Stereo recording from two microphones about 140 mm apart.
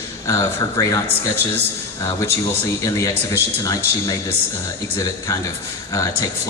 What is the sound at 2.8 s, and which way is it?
Speech, 25° left (ahead or behind).